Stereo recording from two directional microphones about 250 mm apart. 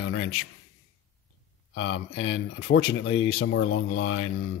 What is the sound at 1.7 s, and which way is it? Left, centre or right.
Speech, left.